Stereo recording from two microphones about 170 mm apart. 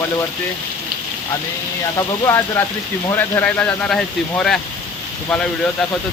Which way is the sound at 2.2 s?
15° left (ahead or behind).